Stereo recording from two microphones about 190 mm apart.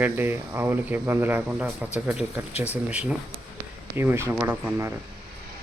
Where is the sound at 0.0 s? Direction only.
10° right (ahead or behind).